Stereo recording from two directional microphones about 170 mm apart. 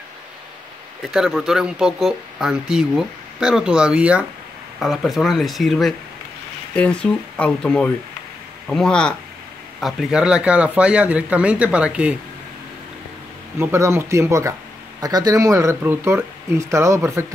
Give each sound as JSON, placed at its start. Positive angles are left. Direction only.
{"t": 1.1, "sound": "speech", "side_deg": -5}
{"t": 13.6, "sound": "speech", "side_deg": -15}